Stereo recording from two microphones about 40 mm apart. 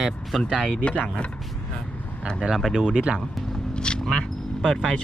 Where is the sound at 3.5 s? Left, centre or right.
Left.